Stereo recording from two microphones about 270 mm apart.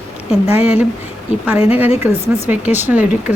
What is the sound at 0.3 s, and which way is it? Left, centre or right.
Speech, left.